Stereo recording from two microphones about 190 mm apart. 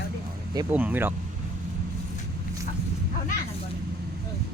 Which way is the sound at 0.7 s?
10° right (ahead or behind).